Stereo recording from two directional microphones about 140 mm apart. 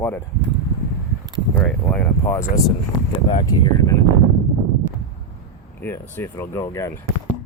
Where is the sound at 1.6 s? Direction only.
10° left (ahead or behind).